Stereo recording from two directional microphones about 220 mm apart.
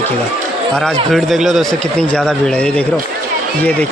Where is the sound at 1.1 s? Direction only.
Centre (ahead or behind).